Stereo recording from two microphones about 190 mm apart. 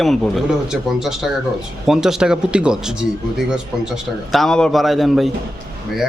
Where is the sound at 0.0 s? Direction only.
Centre (ahead or behind).